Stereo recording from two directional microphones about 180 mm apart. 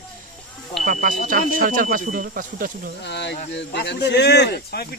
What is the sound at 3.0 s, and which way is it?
Speech, 70° left (ahead or behind).